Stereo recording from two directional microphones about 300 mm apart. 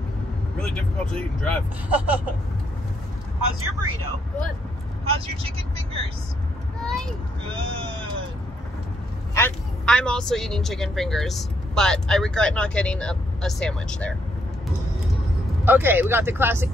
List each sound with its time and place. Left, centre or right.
0.6 s a woman's voice: centre
5.0 s speech: centre
6.8 s vehicle: centre
7.4 s speech: centre
9.3 s a woman's voice: centre
15.6 s speech: centre